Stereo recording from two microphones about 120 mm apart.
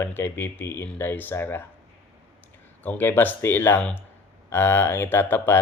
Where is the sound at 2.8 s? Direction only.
15° left (ahead or behind).